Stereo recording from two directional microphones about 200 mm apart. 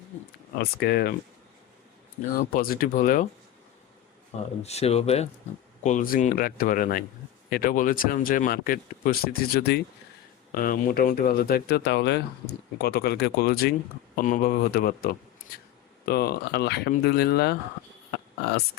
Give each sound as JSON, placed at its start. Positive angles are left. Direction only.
{"t": 0.6, "sound": "speech", "side_deg": 55}
{"t": 2.4, "sound": "speech", "side_deg": 45}
{"t": 4.6, "sound": "speech", "side_deg": 30}